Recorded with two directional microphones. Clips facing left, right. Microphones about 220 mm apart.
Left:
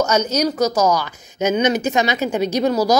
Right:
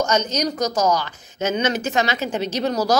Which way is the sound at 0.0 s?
10° left (ahead or behind).